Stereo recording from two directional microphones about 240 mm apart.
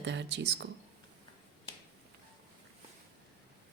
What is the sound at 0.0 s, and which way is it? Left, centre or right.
Speech, right.